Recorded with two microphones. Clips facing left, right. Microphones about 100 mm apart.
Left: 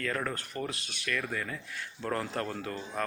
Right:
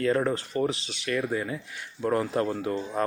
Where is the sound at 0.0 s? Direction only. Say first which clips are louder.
Right 9 dB; 25° right (ahead or behind).